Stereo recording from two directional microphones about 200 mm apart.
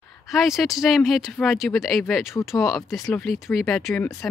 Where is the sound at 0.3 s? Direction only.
Centre (ahead or behind).